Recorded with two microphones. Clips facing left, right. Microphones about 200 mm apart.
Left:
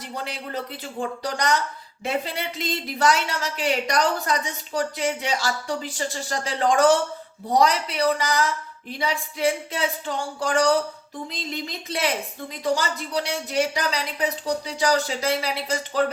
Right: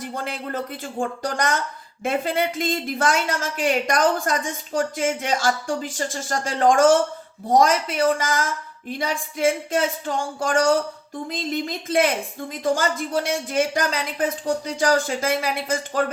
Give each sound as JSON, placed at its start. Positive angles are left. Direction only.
{"t": 0.0, "sound": "speech", "side_deg": -50}